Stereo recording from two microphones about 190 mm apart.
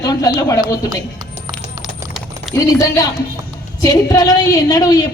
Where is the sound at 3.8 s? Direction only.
20° left (ahead or behind).